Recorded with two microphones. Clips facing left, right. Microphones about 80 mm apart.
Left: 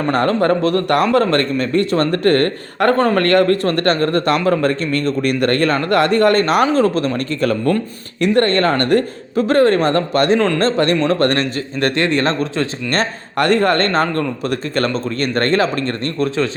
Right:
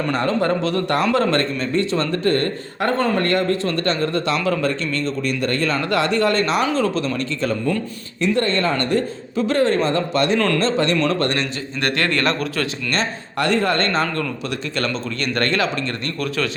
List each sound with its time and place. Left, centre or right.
0.0 s a man's voice: left
10.3 s a man's voice: left
10.6 s a man's voice: left
12.9 s a man's voice: left